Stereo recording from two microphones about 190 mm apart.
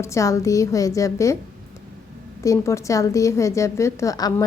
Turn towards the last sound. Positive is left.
turn(degrees=20)  # may be behind; listen again after turning